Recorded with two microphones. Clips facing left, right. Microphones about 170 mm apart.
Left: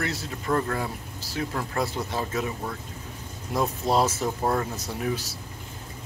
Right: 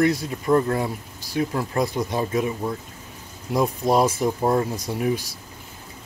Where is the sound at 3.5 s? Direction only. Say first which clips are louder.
Right 4 dB; 15° right (ahead or behind).